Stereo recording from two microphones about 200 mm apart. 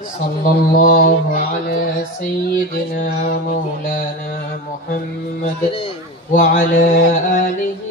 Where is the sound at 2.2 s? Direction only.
45° left (ahead or behind).